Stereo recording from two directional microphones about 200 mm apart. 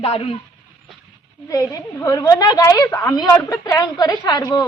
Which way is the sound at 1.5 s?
15° left (ahead or behind).